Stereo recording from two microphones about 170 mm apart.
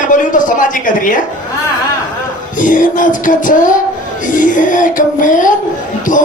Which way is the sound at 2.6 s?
50° left (ahead or behind).